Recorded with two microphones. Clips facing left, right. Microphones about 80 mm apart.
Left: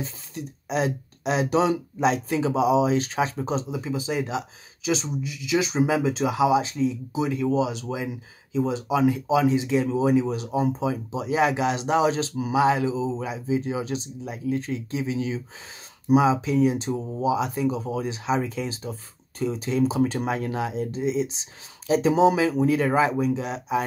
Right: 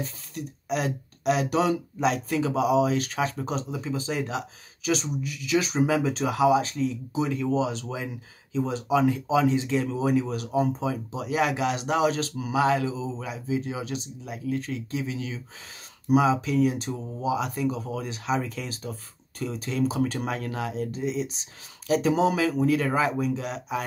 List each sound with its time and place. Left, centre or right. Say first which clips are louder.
0.3 s speech: left 1 dB; left